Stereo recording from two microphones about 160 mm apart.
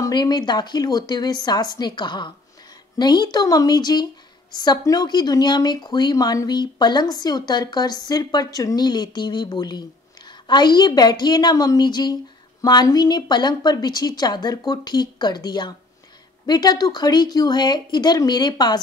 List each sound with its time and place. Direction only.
0.0 s speech: 25° left (ahead or behind)